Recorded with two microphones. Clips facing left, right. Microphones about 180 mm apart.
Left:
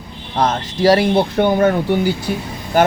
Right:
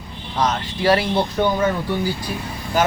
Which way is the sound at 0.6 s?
40° left (ahead or behind).